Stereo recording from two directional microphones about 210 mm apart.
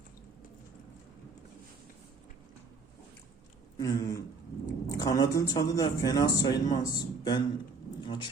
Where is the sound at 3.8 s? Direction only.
15° left (ahead or behind).